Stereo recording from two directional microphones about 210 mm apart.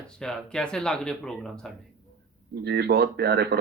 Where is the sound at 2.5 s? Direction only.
50° right (ahead or behind).